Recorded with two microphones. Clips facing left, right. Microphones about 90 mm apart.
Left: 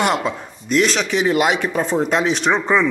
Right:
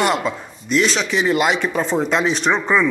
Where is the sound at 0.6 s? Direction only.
50° left (ahead or behind).